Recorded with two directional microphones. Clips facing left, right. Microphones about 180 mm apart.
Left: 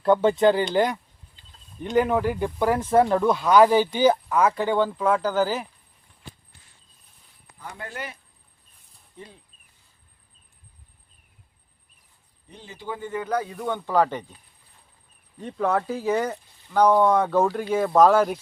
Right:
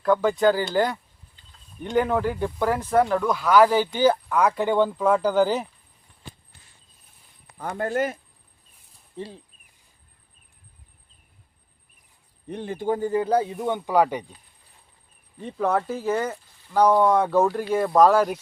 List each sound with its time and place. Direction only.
0.0 s speech: 25° left (ahead or behind); by 5.4 s 10° right (ahead or behind)
5.4 s speech: centre (ahead or behind)
7.6 s speech: 50° right (ahead or behind)
9.1 s speech: 30° right (ahead or behind)
12.5 s speech: 60° right (ahead or behind); by 14.3 s 10° right (ahead or behind)
15.4 s speech: 5° right (ahead or behind)